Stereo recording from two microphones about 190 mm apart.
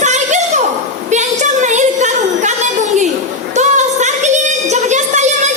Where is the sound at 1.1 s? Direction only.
40° right (ahead or behind).